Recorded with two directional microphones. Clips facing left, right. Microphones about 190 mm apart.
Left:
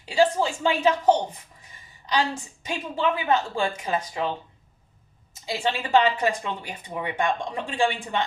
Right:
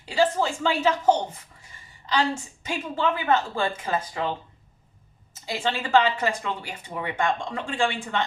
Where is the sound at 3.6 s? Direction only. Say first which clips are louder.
Even; 15° left (ahead or behind).